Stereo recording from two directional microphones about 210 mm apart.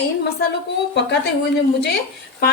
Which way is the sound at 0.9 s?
55° left (ahead or behind).